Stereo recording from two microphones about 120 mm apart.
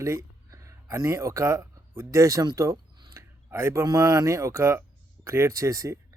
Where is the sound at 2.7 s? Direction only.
40° right (ahead or behind).